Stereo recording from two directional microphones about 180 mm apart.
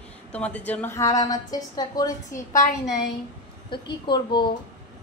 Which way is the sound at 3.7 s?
25° left (ahead or behind).